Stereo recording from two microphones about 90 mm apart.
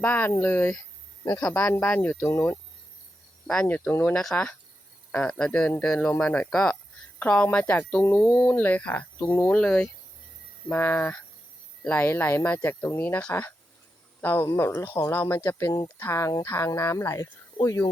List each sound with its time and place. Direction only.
0.0 s speech: 20° left (ahead or behind)
2.1 s speech: 35° left (ahead or behind)
3.4 s speech: 5° left (ahead or behind)
3.7 s speech: 20° left (ahead or behind)
4.1 s speech: 5° left (ahead or behind)
7.2 s speech: 20° left (ahead or behind); by 17.8 s 35° left (ahead or behind)